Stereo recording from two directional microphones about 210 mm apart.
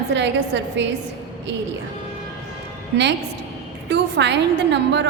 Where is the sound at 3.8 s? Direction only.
55° right (ahead or behind).